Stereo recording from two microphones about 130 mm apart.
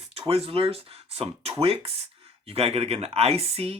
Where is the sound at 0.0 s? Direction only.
50° right (ahead or behind).